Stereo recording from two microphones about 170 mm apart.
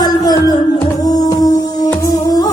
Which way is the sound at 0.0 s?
25° left (ahead or behind).